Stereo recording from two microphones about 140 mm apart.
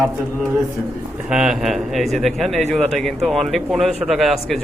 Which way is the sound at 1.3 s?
5° right (ahead or behind).